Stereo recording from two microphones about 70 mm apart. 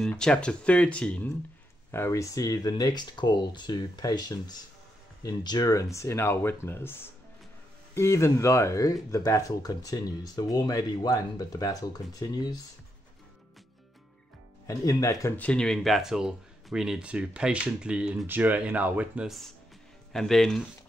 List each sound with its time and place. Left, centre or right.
0.2 s speech: centre
1.9 s speech: left
5.7 s speech: left
14.7 s speech: left
15.3 s speech: centre
16.0 s speech: centre
18.2 s speech: right
20.1 s speech: centre